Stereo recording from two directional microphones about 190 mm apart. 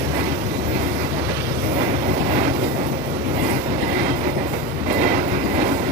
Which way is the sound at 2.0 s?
45° right (ahead or behind).